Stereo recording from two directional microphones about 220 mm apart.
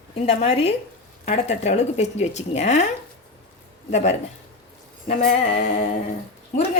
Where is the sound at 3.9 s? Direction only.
30° left (ahead or behind).